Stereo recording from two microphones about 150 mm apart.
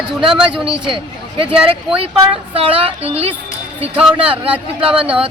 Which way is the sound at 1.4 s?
40° right (ahead or behind).